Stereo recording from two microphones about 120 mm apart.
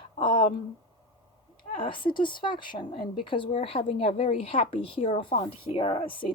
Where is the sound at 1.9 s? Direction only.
45° left (ahead or behind).